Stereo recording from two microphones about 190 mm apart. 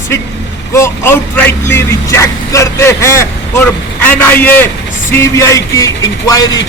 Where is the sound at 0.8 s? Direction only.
10° left (ahead or behind).